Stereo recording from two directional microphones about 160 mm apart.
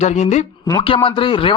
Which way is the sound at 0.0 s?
45° left (ahead or behind).